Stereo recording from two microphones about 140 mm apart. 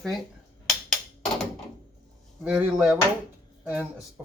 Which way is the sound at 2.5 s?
5° right (ahead or behind).